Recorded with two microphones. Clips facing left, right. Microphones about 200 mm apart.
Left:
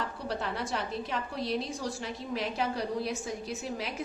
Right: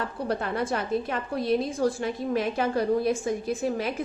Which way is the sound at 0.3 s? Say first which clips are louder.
Right 7 dB; 50° right (ahead or behind).